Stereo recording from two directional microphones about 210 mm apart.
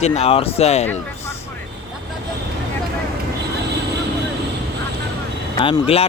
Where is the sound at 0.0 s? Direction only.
30° left (ahead or behind).